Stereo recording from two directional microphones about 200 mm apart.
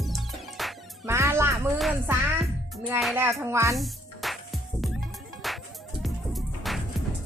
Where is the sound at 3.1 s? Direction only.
15° right (ahead or behind).